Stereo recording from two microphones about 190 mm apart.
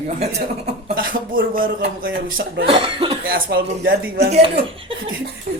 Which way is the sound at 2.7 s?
25° right (ahead or behind).